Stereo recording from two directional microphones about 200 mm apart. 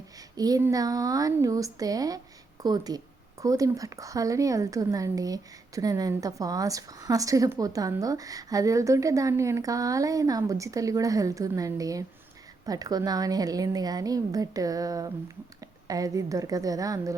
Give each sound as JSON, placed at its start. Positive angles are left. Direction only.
{"t": 0.3, "sound": "a woman's voice", "side_deg": -20}